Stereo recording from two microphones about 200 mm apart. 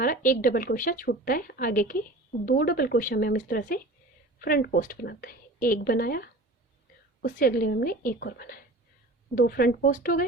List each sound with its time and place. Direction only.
0.0 s speech: 45° left (ahead or behind)